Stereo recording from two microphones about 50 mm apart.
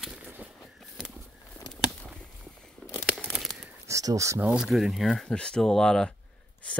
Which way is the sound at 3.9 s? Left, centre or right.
Right.